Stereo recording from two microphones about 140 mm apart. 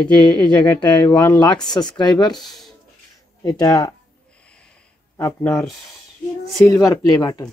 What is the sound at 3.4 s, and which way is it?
Speech, 25° left (ahead or behind).